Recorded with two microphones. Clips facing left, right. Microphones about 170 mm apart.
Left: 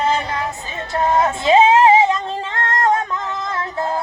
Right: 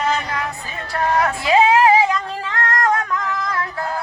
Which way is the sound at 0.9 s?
25° left (ahead or behind).